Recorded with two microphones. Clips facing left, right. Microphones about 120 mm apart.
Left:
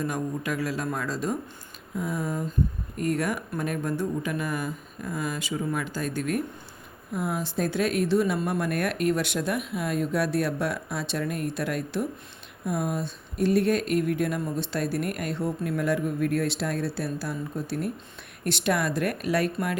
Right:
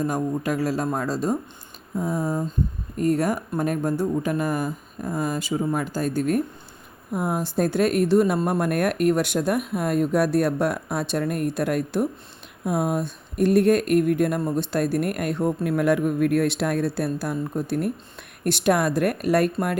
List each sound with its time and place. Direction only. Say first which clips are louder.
0.0 s speech: right 5 dB; 35° right (ahead or behind)